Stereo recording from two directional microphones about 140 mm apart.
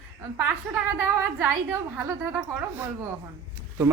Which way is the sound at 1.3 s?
15° right (ahead or behind).